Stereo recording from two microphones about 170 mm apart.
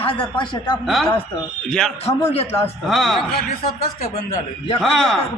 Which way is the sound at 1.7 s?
5° left (ahead or behind).